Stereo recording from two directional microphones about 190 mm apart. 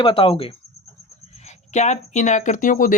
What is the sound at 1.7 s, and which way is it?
Speech, 35° left (ahead or behind).